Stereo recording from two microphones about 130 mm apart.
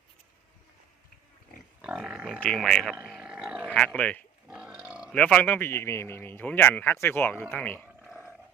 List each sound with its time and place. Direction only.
1.8 s speech: 5° right (ahead or behind)
2.4 s speech: 5° left (ahead or behind)
3.1 s a sound: 5° right (ahead or behind)
3.7 s speech: 10° left (ahead or behind)
4.4 s a sound: 10° right (ahead or behind)
5.1 s speech: 10° left (ahead or behind)